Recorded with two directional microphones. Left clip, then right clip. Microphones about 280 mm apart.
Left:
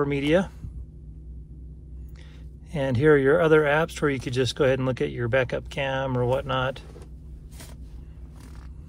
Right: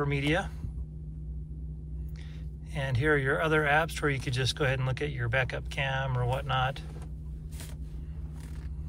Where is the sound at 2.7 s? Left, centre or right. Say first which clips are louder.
Left 8 dB; centre.